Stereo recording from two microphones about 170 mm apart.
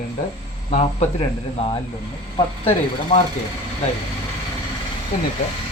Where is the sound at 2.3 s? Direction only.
35° left (ahead or behind).